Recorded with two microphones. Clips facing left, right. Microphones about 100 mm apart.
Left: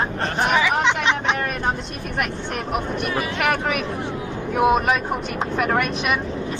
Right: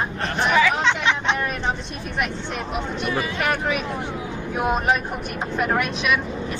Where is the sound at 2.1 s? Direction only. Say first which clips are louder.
Left 1 dB; 55° left (ahead or behind).